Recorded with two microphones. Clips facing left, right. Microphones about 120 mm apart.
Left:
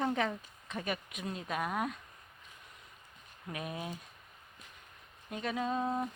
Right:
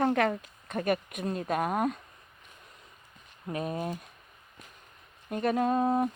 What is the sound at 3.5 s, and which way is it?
Speech, 40° right (ahead or behind).